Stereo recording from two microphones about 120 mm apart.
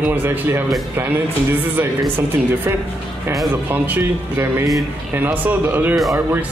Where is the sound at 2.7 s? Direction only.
20° right (ahead or behind).